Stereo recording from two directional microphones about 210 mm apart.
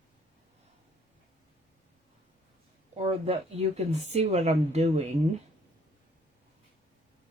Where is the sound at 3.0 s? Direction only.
30° right (ahead or behind).